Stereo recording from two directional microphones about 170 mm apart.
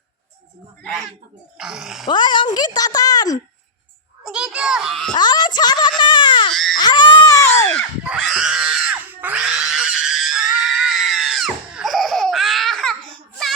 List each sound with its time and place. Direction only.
0.8 s a child's voice: 5° left (ahead or behind)
2.0 s a woman's voice: 25° left (ahead or behind)
4.2 s a child's voice: 5° right (ahead or behind)
5.1 s a woman's voice: 25° left (ahead or behind)
6.5 s baby cry: 5° left (ahead or behind)
6.7 s a woman's voice: 25° left (ahead or behind)
8.0 s screaming: 5° right (ahead or behind)